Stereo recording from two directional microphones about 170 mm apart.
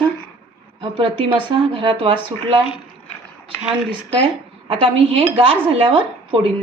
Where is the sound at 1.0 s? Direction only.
30° right (ahead or behind).